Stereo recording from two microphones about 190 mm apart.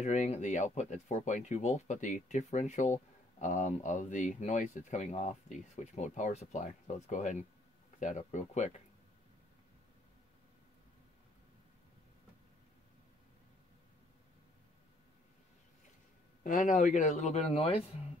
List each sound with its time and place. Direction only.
0.0 s speech: 40° left (ahead or behind)
16.4 s speech: 40° left (ahead or behind)